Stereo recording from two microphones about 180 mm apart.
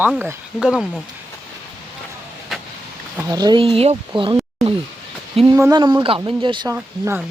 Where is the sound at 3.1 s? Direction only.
20° right (ahead or behind).